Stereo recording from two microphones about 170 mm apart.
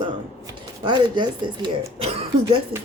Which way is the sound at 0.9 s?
25° right (ahead or behind).